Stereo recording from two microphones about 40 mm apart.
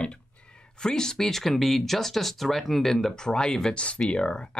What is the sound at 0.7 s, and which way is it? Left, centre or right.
Speech, centre.